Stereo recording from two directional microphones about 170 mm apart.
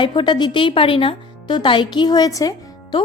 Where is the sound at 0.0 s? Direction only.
30° left (ahead or behind).